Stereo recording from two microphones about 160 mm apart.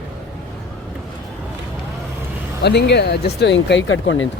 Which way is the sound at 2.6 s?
90° left.